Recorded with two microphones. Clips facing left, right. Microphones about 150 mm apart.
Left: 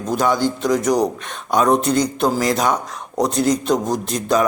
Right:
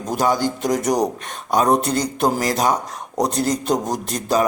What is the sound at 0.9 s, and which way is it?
A man's voice, 40° right (ahead or behind).